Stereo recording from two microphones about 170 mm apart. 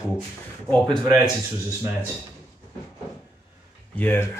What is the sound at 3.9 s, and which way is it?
Speech, 10° left (ahead or behind).